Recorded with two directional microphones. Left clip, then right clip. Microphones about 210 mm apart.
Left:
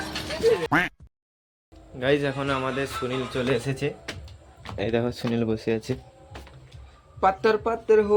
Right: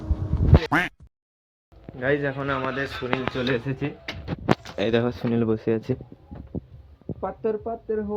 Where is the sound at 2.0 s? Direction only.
15° left (ahead or behind).